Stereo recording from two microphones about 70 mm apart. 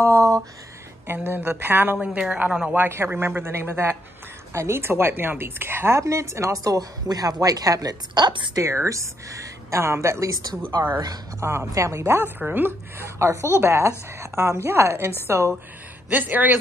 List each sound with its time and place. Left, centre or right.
0.0 s a sound: right
1.0 s a woman's voice: right
2.0 s a woman's voice: centre
2.8 s a woman's voice: right
8.5 s speech: right
10.8 s a woman's voice: right
11.3 s speech: right
12.4 s speech: right
16.1 s a woman's voice: right